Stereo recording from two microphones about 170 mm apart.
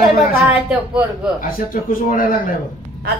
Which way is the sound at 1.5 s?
55° left (ahead or behind).